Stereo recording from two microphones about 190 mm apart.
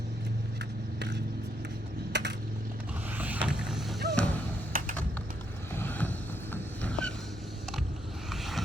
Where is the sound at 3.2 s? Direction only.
10° right (ahead or behind).